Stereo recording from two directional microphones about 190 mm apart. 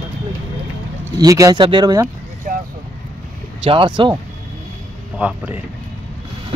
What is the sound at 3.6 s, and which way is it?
Speech, 25° right (ahead or behind).